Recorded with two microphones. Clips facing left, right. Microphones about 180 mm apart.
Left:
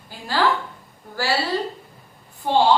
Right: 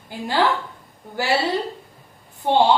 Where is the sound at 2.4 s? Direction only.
20° right (ahead or behind).